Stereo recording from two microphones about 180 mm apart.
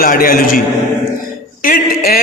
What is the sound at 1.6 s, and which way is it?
Speech, 55° left (ahead or behind).